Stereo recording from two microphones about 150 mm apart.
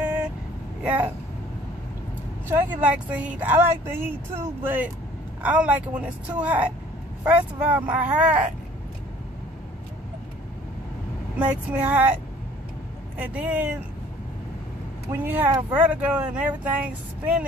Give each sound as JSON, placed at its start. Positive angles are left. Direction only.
{"t": 0.8, "sound": "speech", "side_deg": -10}
{"t": 2.4, "sound": "speech", "side_deg": -15}
{"t": 11.3, "sound": "speech", "side_deg": -10}
{"t": 13.2, "sound": "speech", "side_deg": -10}
{"t": 15.0, "sound": "speech", "side_deg": -10}